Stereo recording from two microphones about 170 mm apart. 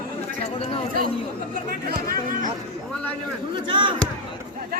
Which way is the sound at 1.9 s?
55° right (ahead or behind).